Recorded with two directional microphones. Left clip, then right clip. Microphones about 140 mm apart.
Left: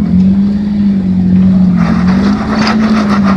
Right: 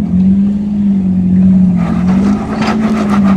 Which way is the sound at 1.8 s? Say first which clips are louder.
Left 2 dB; 5° right (ahead or behind).